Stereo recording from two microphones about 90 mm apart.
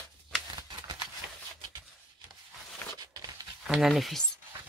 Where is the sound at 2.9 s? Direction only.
45° right (ahead or behind).